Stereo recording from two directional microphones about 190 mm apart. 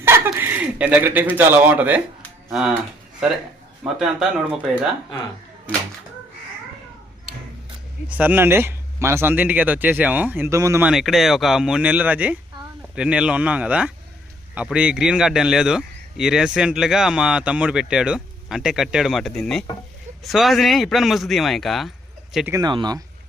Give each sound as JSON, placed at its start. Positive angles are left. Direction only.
{"t": 0.0, "sound": "speech", "side_deg": -10}
{"t": 3.8, "sound": "speech", "side_deg": -5}
{"t": 8.1, "sound": "speech", "side_deg": -10}
{"t": 10.8, "sound": "speech", "side_deg": 0}
{"t": 22.5, "sound": "speech", "side_deg": -20}